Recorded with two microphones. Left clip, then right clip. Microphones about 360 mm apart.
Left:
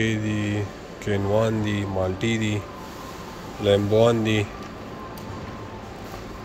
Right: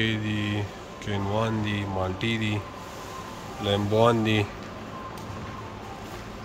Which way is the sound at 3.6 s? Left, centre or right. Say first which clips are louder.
Left 4 dB; centre.